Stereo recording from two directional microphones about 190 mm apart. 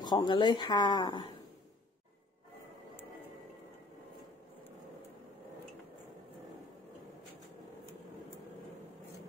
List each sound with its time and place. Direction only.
0.0 s speech: 20° left (ahead or behind)